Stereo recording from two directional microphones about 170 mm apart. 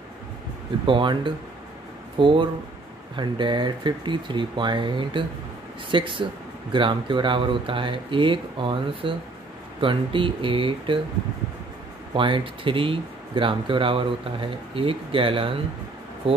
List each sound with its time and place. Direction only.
0.8 s speech: 30° right (ahead or behind)
12.1 s speech: 30° right (ahead or behind)